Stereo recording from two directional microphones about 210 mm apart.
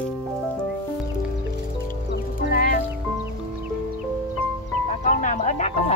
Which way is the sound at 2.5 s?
45° left (ahead or behind).